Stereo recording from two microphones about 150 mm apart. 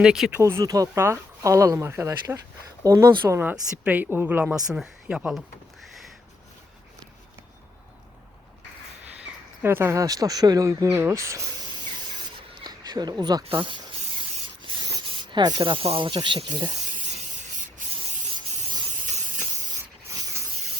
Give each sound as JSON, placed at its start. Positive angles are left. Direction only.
{"t": 0.0, "sound": "speech", "side_deg": -5}
{"t": 0.3, "sound": "speech", "side_deg": -20}
{"t": 9.6, "sound": "speech", "side_deg": -15}
{"t": 12.6, "sound": "a sound", "side_deg": -25}
{"t": 13.4, "sound": "speech", "side_deg": -35}
{"t": 14.6, "sound": "snake", "side_deg": -35}
{"t": 20.1, "sound": "spray", "side_deg": -20}